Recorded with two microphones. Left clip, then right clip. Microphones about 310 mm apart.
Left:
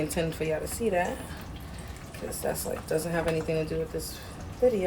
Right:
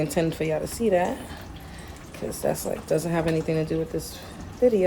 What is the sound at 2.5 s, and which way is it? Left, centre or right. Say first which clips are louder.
Speech: right 5 dB; right.